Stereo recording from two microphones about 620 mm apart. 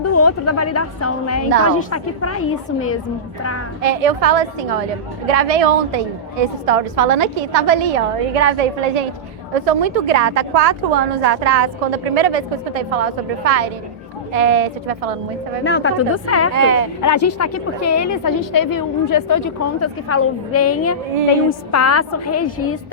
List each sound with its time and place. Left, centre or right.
0.0 s a woman's voice: left
3.8 s a woman's voice: right
9.6 s a woman's voice: right
10.1 s a woman's voice: right
15.6 s a woman's voice: centre
16.6 s speech: right
17.0 s a woman's voice: left